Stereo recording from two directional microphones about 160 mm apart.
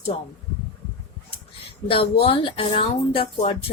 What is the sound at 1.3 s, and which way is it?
Speech, 35° left (ahead or behind).